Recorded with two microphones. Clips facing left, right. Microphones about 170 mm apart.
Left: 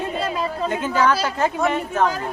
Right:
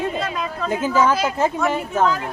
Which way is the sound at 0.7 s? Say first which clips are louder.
Right 2 dB; 5° right (ahead or behind).